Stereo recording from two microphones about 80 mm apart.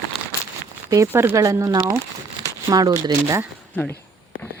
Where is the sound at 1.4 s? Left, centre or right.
Right.